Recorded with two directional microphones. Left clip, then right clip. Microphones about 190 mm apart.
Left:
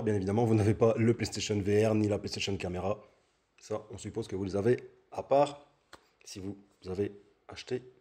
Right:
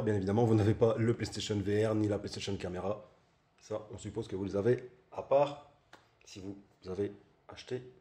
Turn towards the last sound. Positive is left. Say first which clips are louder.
# left 4 dB
turn(degrees=40)  # may be behind; listen again after turning